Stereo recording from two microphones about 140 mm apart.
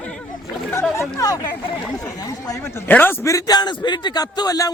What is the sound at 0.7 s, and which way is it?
A man's voice, 20° left (ahead or behind).